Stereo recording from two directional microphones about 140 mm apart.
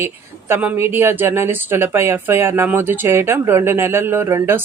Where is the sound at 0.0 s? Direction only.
15° right (ahead or behind).